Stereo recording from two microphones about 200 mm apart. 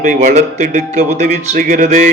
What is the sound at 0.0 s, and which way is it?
Music, 40° right (ahead or behind).